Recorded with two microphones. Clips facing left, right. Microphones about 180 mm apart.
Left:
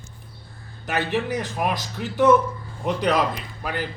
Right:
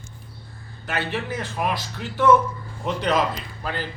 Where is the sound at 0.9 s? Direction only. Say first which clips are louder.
Left 3 dB; 15° left (ahead or behind).